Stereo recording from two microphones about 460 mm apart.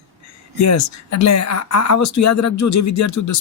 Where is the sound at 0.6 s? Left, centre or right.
Left.